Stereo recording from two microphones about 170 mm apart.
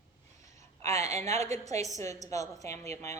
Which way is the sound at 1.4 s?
40° right (ahead or behind).